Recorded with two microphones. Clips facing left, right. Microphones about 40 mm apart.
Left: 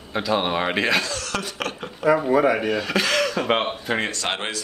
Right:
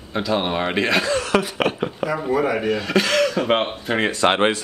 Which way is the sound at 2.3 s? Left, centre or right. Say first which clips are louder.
Left 1 dB; centre.